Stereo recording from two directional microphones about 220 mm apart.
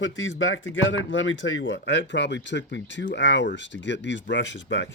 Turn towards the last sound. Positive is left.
turn(degrees=55)  # may be behind; listen again after turning